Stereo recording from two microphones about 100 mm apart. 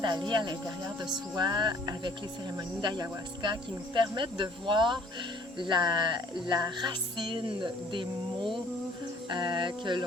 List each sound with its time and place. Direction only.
0.0 s speech: 50° right (ahead or behind)